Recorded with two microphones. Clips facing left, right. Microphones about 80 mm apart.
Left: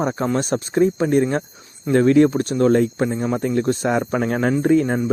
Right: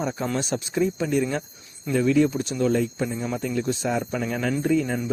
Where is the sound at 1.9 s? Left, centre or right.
Left.